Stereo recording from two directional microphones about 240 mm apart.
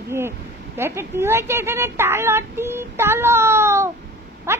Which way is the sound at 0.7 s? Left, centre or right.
Centre.